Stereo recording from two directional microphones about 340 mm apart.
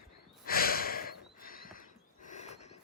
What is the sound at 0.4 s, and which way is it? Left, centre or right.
Breathing, left.